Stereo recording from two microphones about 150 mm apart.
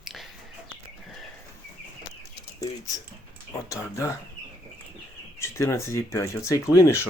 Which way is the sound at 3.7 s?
20° left (ahead or behind).